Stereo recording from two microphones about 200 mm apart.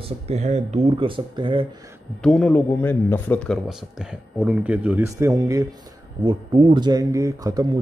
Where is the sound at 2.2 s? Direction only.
5° left (ahead or behind).